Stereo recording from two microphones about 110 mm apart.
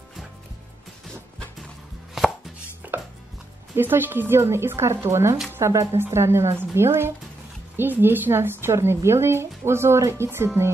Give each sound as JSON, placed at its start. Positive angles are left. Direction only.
{"t": 2.8, "sound": "chopping", "side_deg": -20}
{"t": 3.7, "sound": "a woman's voice", "side_deg": -20}